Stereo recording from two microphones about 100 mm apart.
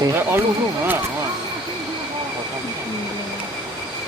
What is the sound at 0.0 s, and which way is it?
Speech, 25° right (ahead or behind).